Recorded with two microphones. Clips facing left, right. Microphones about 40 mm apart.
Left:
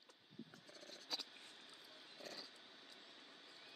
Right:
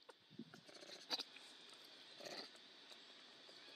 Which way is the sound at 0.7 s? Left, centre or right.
Centre.